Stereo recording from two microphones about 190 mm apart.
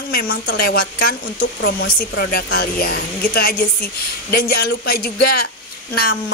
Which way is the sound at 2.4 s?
55° left (ahead or behind).